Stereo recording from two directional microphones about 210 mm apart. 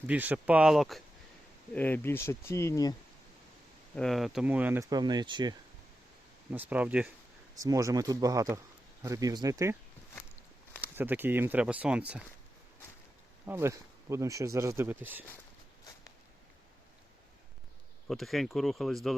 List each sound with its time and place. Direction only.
0.1 s speech: 10° right (ahead or behind); by 2.9 s 15° left (ahead or behind)
3.9 s speech: centre (ahead or behind); by 5.5 s 20° right (ahead or behind)
6.5 s speech: 10° right (ahead or behind)
10.8 s speech: 10° right (ahead or behind)
13.4 s speech: 10° right (ahead or behind)
18.1 s speech: centre (ahead or behind)